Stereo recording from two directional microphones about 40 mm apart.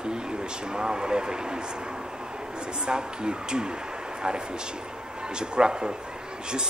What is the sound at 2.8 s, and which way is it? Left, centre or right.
Speech, right.